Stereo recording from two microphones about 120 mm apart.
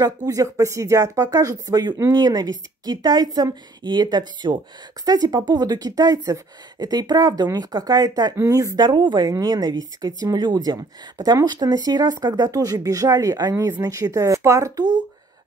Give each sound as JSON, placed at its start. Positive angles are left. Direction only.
{"t": 0.0, "sound": "a woman's voice", "side_deg": -30}